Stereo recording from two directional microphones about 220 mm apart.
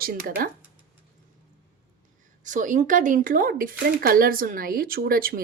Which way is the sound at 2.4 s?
35° right (ahead or behind).